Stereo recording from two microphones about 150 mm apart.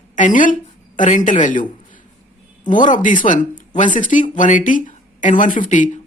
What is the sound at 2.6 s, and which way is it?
Speech, 60° left (ahead or behind).